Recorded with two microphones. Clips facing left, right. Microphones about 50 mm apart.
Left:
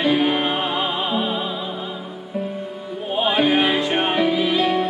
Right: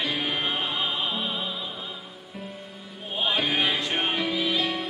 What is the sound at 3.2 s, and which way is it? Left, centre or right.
Music, left.